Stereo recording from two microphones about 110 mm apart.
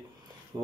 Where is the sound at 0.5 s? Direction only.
35° right (ahead or behind).